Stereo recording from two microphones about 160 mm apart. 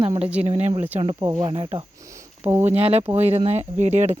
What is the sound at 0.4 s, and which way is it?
Speech, 45° right (ahead or behind).